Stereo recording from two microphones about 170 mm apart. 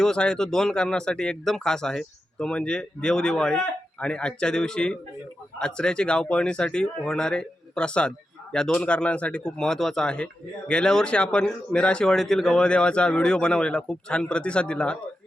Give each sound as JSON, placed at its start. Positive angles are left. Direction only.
{"t": 0.0, "sound": "speech", "side_deg": 5}